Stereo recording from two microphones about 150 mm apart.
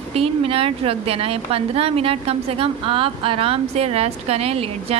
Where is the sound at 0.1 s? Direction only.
40° right (ahead or behind).